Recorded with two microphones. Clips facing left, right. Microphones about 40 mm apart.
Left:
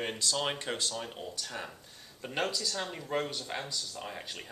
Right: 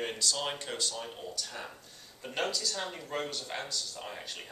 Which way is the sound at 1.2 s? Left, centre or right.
Centre.